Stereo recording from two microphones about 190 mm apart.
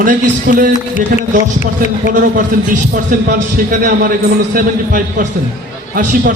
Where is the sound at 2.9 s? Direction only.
50° right (ahead or behind).